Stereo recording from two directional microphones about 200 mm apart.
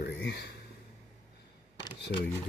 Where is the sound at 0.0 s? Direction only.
55° left (ahead or behind).